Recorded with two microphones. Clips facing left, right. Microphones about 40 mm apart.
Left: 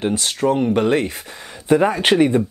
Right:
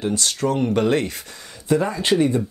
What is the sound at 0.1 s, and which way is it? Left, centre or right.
Speech, centre.